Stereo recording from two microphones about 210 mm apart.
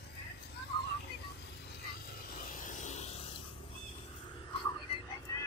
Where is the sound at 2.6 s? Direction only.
35° left (ahead or behind).